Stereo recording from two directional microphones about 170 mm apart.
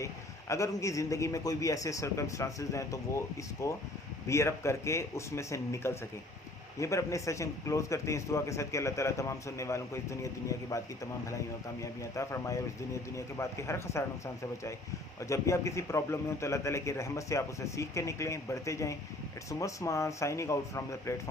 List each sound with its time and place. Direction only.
0.0 s a man's voice: 15° left (ahead or behind)
15.2 s a man's voice: 15° left (ahead or behind)